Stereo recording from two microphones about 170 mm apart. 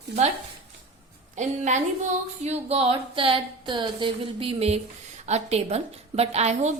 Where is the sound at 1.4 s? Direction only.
45° right (ahead or behind).